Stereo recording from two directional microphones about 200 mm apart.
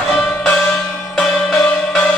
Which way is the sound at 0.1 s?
5° left (ahead or behind).